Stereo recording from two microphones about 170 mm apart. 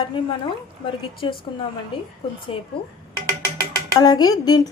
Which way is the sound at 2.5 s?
35° left (ahead or behind).